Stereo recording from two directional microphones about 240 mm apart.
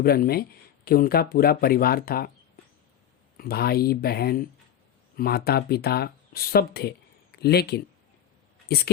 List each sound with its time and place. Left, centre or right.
0.0 s speech: left
3.3 s speech: left